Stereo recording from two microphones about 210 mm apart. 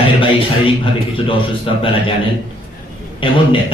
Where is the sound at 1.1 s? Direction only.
25° left (ahead or behind).